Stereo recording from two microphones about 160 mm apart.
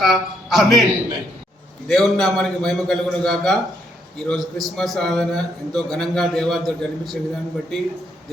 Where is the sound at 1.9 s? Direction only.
Centre (ahead or behind).